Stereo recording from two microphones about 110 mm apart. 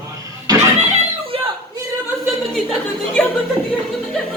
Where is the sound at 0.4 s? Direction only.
30° right (ahead or behind).